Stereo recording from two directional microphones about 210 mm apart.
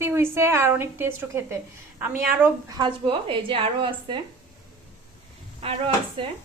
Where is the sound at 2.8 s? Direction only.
25° right (ahead or behind).